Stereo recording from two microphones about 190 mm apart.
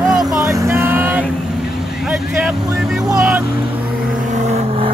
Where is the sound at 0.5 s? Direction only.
15° right (ahead or behind).